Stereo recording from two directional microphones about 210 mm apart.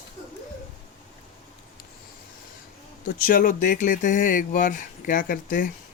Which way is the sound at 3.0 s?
40° left (ahead or behind).